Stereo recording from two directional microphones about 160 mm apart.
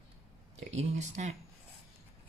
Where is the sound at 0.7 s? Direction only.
45° right (ahead or behind).